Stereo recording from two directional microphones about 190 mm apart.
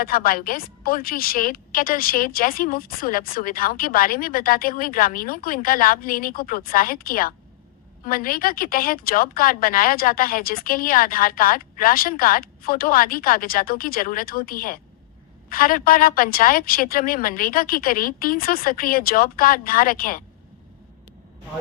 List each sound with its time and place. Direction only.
0.0 s a woman's voice: 50° left (ahead or behind)